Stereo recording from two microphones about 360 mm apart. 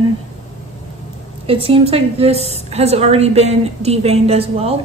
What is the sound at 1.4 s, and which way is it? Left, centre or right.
A woman's voice, centre.